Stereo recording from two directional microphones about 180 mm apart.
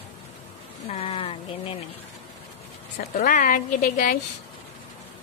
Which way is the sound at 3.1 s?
50° left (ahead or behind).